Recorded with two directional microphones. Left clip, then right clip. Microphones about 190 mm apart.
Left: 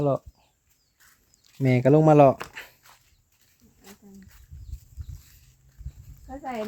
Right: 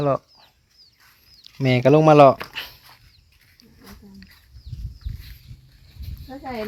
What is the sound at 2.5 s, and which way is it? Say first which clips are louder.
Dog: right 9 dB; 10° left (ahead or behind).